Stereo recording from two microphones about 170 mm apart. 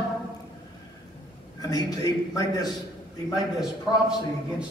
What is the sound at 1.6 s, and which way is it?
A man's voice, 25° left (ahead or behind).